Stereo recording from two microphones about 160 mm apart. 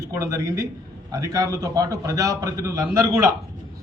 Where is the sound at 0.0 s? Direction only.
20° right (ahead or behind).